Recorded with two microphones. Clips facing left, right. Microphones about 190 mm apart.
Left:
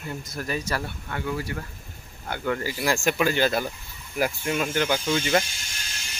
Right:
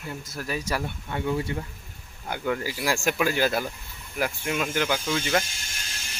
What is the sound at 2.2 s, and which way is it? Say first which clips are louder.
Speech: even; 10° right (ahead or behind).